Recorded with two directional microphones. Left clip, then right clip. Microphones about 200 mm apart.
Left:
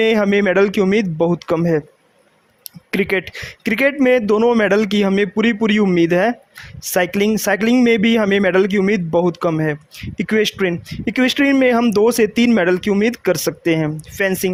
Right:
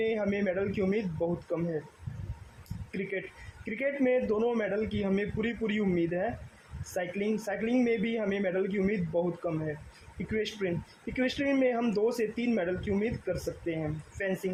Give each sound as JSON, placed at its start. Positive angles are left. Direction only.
{"t": 0.0, "sound": "speech", "side_deg": 55}
{"t": 3.1, "sound": "speech", "side_deg": 55}
{"t": 10.3, "sound": "speech", "side_deg": 55}